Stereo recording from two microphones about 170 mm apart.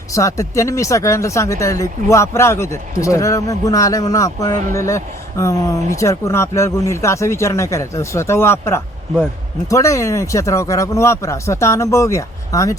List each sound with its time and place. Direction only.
0.1 s speech: 20° left (ahead or behind)